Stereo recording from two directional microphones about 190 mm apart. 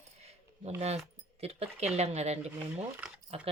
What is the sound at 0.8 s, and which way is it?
Speech, 35° right (ahead or behind).